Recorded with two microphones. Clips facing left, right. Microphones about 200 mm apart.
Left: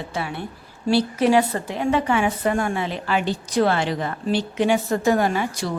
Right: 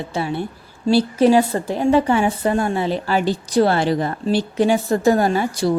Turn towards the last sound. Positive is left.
turn(degrees=-35)  # may be behind; listen again after turning